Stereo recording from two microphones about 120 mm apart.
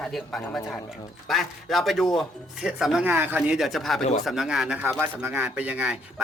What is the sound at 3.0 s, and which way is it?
Speech, 15° right (ahead or behind).